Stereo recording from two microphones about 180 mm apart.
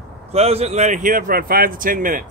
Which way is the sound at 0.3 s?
35° right (ahead or behind).